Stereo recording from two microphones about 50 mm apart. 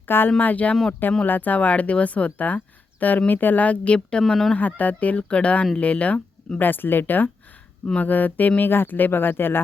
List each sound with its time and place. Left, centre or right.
0.3 s speech: left
4.3 s speech: centre
4.5 s speech: left